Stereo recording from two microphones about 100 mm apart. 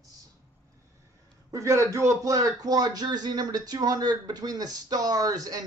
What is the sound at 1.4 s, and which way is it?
Speech, 30° right (ahead or behind).